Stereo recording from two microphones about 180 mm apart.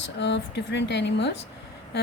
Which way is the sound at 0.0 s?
75° left (ahead or behind).